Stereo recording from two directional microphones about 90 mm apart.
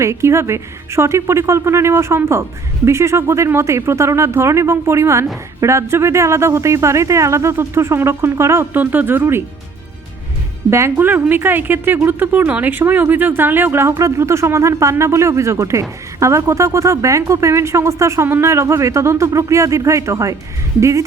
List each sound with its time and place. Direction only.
0.0 s speech: 30° right (ahead or behind)
10.7 s speech: 30° right (ahead or behind)